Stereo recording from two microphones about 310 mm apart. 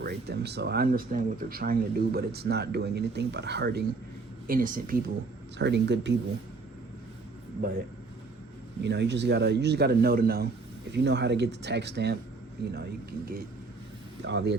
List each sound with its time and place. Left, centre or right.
0.0 s speech: right
8.8 s speech: right